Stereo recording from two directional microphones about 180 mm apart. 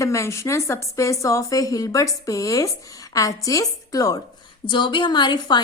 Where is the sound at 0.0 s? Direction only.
15° left (ahead or behind).